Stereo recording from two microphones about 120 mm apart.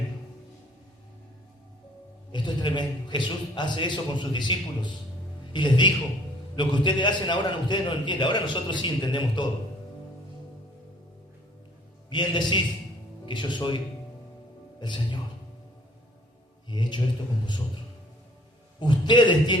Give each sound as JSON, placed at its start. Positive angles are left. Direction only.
{"t": 2.3, "sound": "a man's voice", "side_deg": 40}
{"t": 12.1, "sound": "a man's voice", "side_deg": 40}
{"t": 16.6, "sound": "a man's voice", "side_deg": 40}
{"t": 18.8, "sound": "a man's voice", "side_deg": 40}